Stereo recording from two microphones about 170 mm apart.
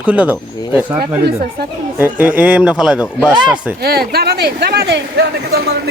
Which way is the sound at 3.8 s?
70° right (ahead or behind).